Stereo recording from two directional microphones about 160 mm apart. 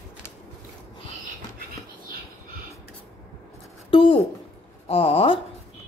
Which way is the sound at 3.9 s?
30° left (ahead or behind).